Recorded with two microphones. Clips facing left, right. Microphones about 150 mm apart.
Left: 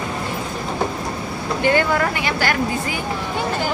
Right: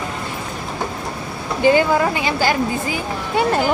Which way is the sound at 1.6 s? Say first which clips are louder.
Right 4 dB; 15° right (ahead or behind).